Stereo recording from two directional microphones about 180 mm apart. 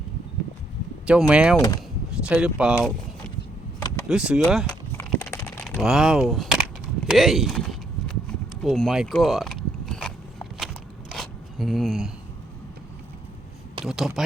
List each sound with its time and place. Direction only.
1.0 s speech: 5° right (ahead or behind)
1.5 s speech: 20° left (ahead or behind)
2.2 s speech: 5° right (ahead or behind)
4.1 s speech: 5° right (ahead or behind)
4.7 s a sound: 10° left (ahead or behind)
5.6 s speech: centre (ahead or behind)
7.1 s a sound: centre (ahead or behind)
8.6 s biting: centre (ahead or behind)
11.1 s a sound: centre (ahead or behind)
13.8 s speech: centre (ahead or behind)